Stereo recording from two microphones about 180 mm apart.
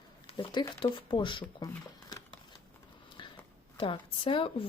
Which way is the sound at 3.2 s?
25° left (ahead or behind).